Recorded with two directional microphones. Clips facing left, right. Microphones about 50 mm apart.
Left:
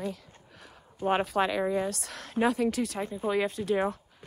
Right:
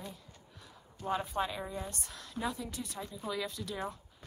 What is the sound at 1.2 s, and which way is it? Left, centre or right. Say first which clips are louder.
Speech: left 9 dB; left.